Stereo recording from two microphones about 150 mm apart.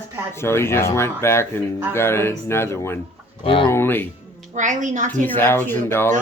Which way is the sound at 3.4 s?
35° left (ahead or behind).